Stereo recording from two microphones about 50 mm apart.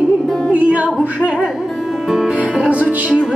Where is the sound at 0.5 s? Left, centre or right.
Right.